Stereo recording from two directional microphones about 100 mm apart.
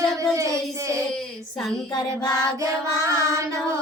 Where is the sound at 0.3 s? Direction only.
30° right (ahead or behind).